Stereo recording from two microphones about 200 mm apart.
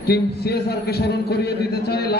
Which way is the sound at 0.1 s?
55° left (ahead or behind).